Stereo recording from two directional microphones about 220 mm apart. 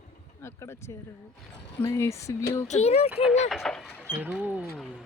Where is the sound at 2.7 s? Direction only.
30° left (ahead or behind).